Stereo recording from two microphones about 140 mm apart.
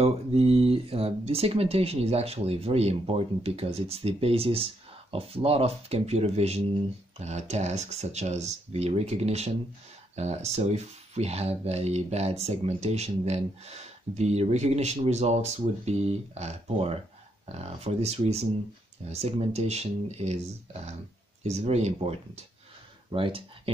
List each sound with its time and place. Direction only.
0.0 s speech: 45° right (ahead or behind)